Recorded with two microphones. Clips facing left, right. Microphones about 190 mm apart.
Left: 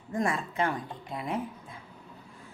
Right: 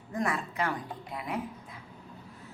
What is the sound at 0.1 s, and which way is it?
Speech, 25° left (ahead or behind).